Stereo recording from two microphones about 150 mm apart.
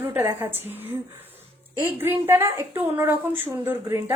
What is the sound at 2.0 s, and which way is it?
A woman's voice, 15° right (ahead or behind).